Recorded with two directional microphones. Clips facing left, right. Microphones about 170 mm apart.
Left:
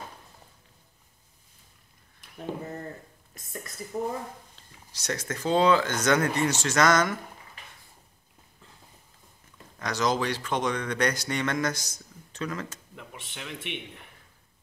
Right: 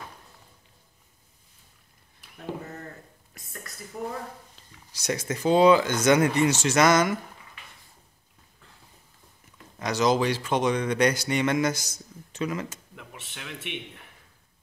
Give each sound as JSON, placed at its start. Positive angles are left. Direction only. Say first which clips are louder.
{"t": 3.9, "sound": "speech", "louder": "left 3 dB", "side_deg": 30}
{"t": 4.9, "sound": "speech", "louder": "right 3 dB", "side_deg": -10}
{"t": 9.8, "sound": "speech", "louder": "right 4 dB", "side_deg": -10}
{"t": 12.9, "sound": "a man's voice", "louder": "left 1 dB", "side_deg": 0}